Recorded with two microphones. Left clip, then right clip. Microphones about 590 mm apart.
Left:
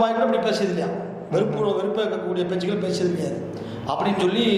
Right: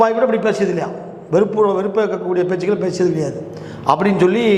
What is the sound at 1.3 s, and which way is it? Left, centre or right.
A man's voice, right.